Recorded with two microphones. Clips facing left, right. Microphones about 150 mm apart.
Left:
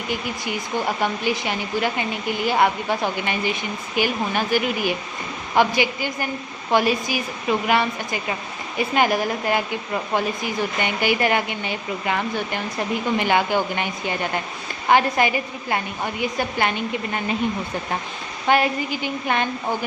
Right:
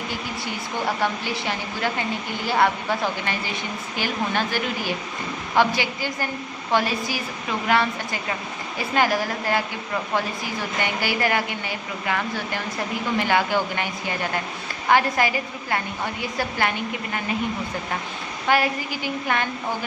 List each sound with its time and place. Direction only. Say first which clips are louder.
1.0 s a woman's voice: left 2 dB; 15° left (ahead or behind)
18.4 s a woman's voice: left 2 dB; 20° left (ahead or behind)